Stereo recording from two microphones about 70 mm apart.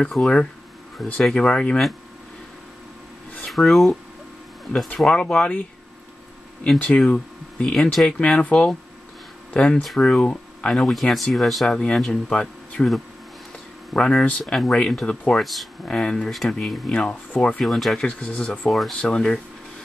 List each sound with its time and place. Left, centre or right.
0.0 s speech: centre
1.3 s speech: centre
3.4 s speech: centre
4.9 s speech: centre
7.1 s speech: centre
9.8 s speech: centre
10.7 s speech: centre
13.9 s speech: centre
15.8 s speech: centre
16.3 s speech: centre
16.9 s speech: centre
17.6 s speech: centre
18.0 s speech: centre
18.7 s speech: centre